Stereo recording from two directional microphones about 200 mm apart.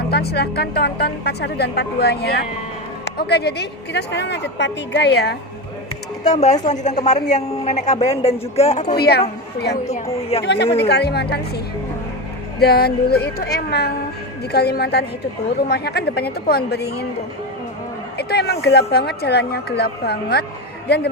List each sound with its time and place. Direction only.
0.1 s a woman's voice: 55° left (ahead or behind)
6.2 s speech: 35° left (ahead or behind)
9.0 s speech: 55° left (ahead or behind)
9.9 s a woman's voice: 30° left (ahead or behind)
10.4 s a woman's voice: 60° left (ahead or behind)
18.2 s a man's voice: 55° left (ahead or behind)